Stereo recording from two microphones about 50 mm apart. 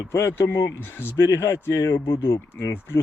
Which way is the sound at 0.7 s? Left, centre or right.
Left.